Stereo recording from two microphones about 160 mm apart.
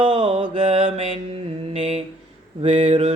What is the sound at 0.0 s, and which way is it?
Mantra, 30° right (ahead or behind).